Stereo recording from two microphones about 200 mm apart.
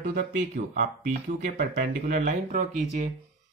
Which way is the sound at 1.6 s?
45° right (ahead or behind).